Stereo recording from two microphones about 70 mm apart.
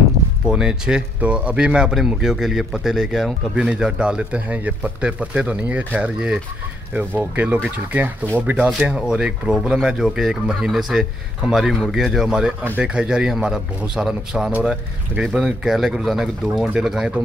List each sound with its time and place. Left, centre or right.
0.5 s a man's voice: centre
3.5 s a man's voice: centre